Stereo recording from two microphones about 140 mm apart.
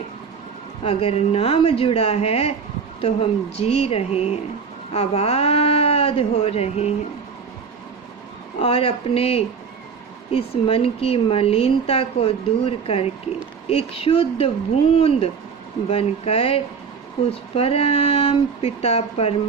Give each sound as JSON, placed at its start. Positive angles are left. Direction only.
{"t": 0.8, "sound": "speech", "side_deg": 45}
{"t": 8.5, "sound": "speech", "side_deg": 45}